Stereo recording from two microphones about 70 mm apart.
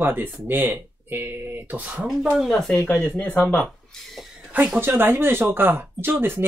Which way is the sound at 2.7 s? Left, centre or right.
Left.